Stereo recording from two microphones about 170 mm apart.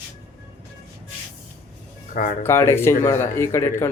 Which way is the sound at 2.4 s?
15° left (ahead or behind).